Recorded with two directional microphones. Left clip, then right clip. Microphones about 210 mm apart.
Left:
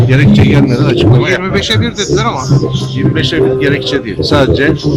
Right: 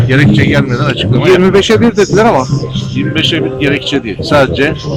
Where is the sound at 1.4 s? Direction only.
40° right (ahead or behind).